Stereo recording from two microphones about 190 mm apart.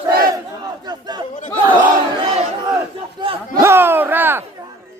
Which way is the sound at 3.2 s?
30° right (ahead or behind).